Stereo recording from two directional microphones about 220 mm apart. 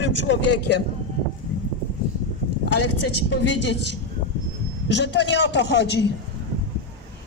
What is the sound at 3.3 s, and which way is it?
A man's voice, 55° left (ahead or behind).